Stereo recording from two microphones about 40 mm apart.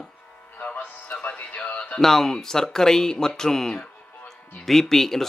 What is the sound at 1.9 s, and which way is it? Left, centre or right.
Speech, centre.